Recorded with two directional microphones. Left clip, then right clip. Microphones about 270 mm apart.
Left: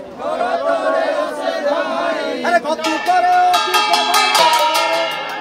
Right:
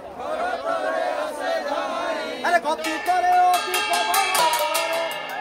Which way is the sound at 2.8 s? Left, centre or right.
Centre.